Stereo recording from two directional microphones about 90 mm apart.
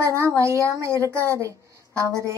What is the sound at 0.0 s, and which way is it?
A woman's voice, 30° right (ahead or behind).